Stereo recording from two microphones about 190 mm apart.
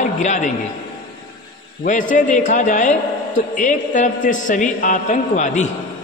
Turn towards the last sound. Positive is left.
turn(degrees=40)  # may be behind; listen again after turning